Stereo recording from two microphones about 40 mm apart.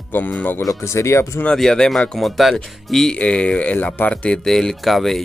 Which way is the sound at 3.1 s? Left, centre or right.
Left.